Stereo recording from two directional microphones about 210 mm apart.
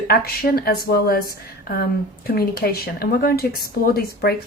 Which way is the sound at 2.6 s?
45° left (ahead or behind).